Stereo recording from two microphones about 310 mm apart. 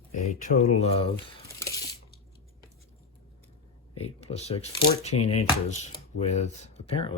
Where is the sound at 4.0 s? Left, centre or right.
Centre.